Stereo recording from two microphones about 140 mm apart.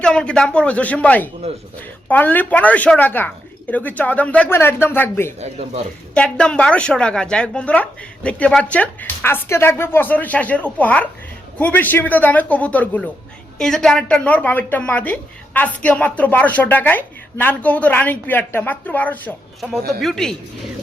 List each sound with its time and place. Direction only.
0.0 s a woman's voice: 5° left (ahead or behind)
5.4 s speech: 50° right (ahead or behind)
6.1 s a woman's voice: 10° left (ahead or behind)